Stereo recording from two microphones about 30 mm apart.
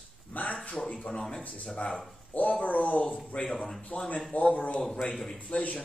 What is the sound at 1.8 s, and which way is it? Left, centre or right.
Speech, left.